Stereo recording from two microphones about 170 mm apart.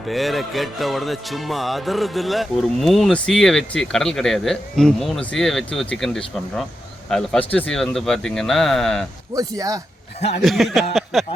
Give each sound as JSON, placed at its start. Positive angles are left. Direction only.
{"t": 0.0, "sound": "music", "side_deg": 0}
{"t": 9.3, "sound": "speech", "side_deg": -20}
{"t": 10.2, "sound": "speech", "side_deg": 40}
{"t": 10.4, "sound": "music", "side_deg": 0}
{"t": 10.9, "sound": "a sound", "side_deg": 0}